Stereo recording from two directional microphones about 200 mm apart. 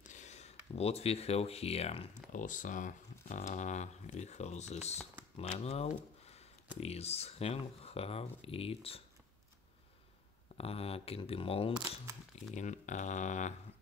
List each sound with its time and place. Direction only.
0.0 s speech: 35° left (ahead or behind)
10.6 s speech: 30° left (ahead or behind)